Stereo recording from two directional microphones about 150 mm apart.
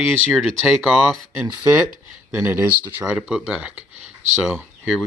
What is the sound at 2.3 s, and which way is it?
Speech, 15° right (ahead or behind).